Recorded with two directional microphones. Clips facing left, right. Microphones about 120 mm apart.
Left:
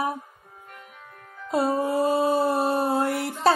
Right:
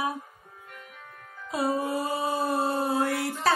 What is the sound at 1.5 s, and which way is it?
Music, 25° left (ahead or behind).